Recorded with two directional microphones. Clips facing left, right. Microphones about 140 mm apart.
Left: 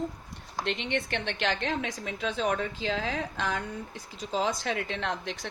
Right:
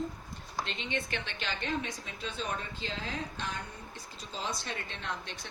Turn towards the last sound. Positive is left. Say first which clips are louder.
# left 7 dB
turn(degrees=90)